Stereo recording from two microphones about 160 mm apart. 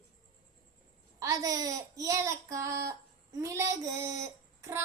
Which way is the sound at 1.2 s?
20° right (ahead or behind).